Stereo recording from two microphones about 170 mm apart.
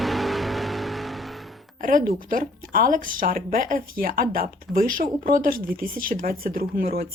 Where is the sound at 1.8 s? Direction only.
55° right (ahead or behind).